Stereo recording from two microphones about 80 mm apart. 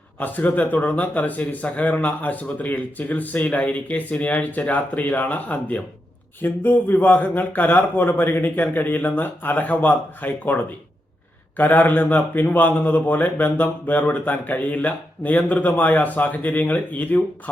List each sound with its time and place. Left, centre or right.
0.2 s a man's voice: left